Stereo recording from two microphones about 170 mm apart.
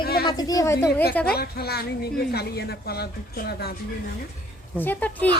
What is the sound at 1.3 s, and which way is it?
Speech, 65° left (ahead or behind).